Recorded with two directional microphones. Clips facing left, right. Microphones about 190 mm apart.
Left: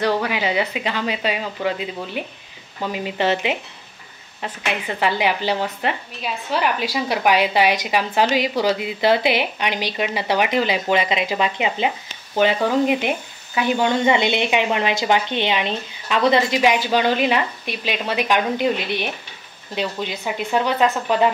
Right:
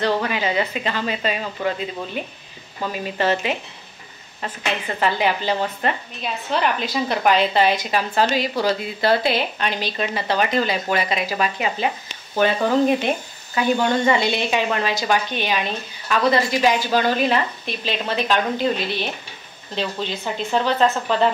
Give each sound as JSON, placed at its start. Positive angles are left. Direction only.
{"t": 0.0, "sound": "a woman's voice", "side_deg": 10}